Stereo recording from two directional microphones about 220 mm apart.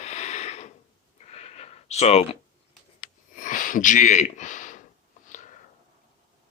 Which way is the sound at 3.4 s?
35° left (ahead or behind).